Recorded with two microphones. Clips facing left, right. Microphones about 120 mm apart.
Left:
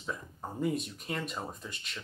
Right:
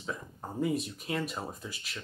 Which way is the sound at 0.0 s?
Centre (ahead or behind).